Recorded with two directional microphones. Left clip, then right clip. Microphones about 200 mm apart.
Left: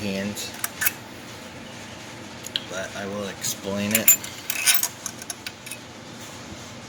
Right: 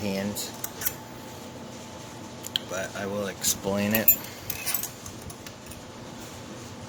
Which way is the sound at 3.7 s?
5° left (ahead or behind).